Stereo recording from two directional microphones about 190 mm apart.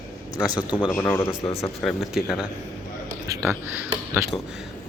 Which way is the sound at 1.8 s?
Centre (ahead or behind).